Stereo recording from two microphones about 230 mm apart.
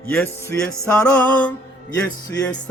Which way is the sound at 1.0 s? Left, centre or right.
Centre.